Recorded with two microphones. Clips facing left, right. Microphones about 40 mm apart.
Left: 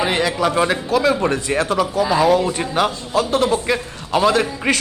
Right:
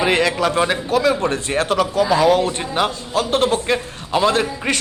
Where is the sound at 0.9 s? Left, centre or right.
Right.